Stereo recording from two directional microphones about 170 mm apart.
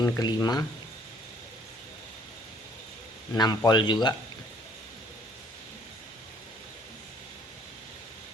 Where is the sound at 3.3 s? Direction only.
25° left (ahead or behind).